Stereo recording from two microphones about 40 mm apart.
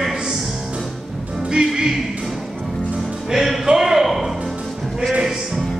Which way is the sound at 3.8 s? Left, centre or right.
Centre.